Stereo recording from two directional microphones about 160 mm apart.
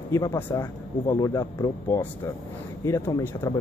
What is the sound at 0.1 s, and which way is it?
Speech, 20° left (ahead or behind).